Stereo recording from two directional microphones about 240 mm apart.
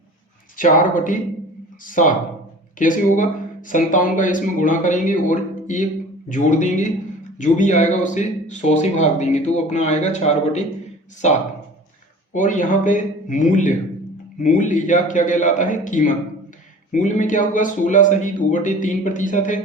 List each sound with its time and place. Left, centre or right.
0.5 s speech: left